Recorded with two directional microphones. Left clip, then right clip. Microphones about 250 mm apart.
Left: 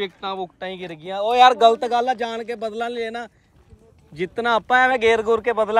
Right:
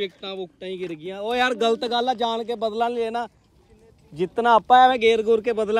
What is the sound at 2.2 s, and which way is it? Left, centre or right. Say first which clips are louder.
A man's voice: right 2 dB; centre.